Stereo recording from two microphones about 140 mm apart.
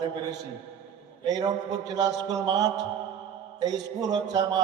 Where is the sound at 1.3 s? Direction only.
25° right (ahead or behind).